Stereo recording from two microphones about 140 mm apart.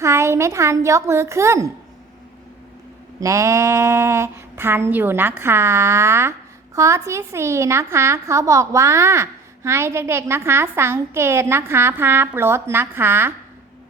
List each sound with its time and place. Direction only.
0.0 s a woman's voice: 20° right (ahead or behind)
3.2 s a woman's voice: 20° right (ahead or behind)